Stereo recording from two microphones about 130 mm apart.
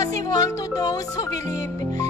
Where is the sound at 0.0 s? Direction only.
30° left (ahead or behind).